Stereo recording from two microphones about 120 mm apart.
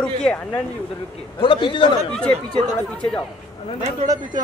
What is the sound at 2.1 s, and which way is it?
Speech, 10° left (ahead or behind).